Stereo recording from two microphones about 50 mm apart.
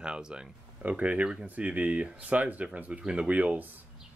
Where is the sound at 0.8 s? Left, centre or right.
Right.